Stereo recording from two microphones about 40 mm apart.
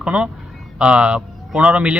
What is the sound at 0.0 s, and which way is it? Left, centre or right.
Speech, right.